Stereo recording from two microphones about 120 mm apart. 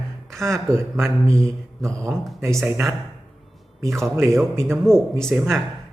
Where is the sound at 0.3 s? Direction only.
25° right (ahead or behind).